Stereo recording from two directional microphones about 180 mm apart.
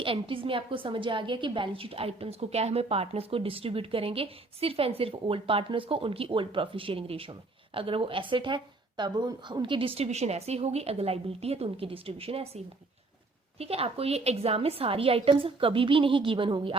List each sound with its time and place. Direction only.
0.0 s a woman's voice: 30° right (ahead or behind)